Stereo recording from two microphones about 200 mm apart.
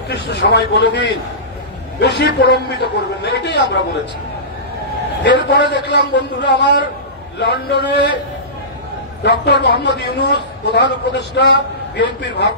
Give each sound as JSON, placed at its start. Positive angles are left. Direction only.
{"t": 0.1, "sound": "a man's voice", "side_deg": 55}
{"t": 5.2, "sound": "a man's voice", "side_deg": 60}
{"t": 9.2, "sound": "a man's voice", "side_deg": 55}